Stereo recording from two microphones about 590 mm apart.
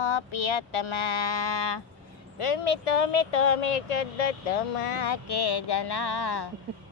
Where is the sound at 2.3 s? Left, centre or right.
Left.